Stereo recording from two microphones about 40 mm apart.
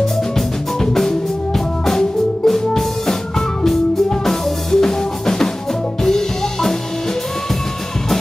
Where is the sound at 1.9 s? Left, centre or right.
Centre.